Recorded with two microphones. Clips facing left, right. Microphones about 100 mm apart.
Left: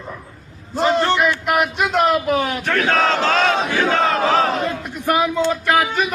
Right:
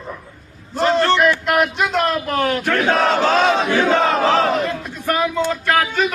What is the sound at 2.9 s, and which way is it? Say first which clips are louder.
Battle cry: right 2 dB; 15° right (ahead or behind).